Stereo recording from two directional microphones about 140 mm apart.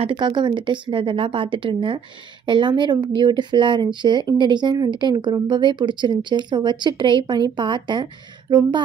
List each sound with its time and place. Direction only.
0.0 s speech: 35° right (ahead or behind)